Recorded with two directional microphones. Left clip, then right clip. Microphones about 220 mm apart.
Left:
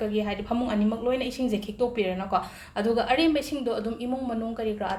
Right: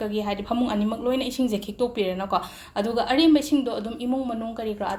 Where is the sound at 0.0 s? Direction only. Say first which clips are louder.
Right 1 dB; 35° right (ahead or behind).